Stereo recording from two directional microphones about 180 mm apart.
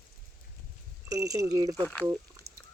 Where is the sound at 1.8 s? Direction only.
10° left (ahead or behind).